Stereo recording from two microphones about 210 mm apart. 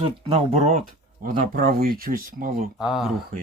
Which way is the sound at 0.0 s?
30° right (ahead or behind).